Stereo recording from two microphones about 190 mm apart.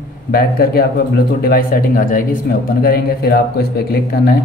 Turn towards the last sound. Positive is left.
turn(degrees=55)  # may be behind; listen again after turning